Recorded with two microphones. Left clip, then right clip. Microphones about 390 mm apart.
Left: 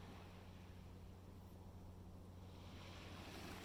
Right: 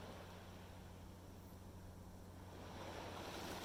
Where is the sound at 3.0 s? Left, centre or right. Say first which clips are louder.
Right 5 dB; centre.